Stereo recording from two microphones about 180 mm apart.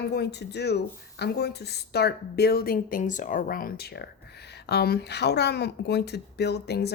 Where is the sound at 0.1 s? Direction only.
70° left (ahead or behind).